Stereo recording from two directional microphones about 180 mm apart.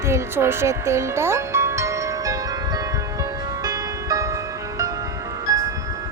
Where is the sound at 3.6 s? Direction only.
20° right (ahead or behind).